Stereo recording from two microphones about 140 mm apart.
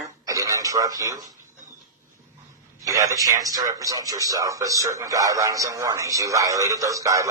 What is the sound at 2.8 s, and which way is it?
A man's voice, 25° right (ahead or behind).